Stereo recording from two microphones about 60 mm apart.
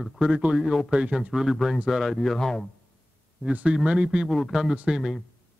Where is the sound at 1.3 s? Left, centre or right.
Centre.